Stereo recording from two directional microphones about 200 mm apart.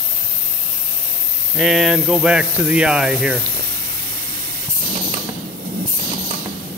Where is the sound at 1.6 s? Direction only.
Centre (ahead or behind).